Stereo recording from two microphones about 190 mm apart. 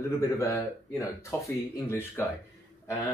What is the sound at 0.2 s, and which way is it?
Speech, 15° left (ahead or behind).